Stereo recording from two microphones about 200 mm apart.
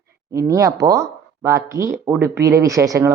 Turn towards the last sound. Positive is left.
turn(degrees=-15)  # may be behind; listen again after turning